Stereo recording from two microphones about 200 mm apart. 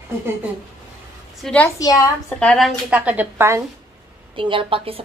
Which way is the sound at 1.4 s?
5° left (ahead or behind).